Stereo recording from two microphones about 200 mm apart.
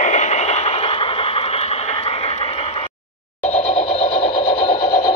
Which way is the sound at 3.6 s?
30° left (ahead or behind).